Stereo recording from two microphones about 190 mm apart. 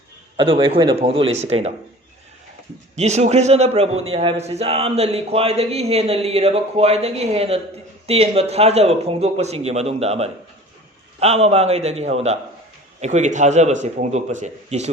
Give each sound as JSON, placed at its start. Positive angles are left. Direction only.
{"t": 0.3, "sound": "speech", "side_deg": -30}
{"t": 2.9, "sound": "a man's voice", "side_deg": -35}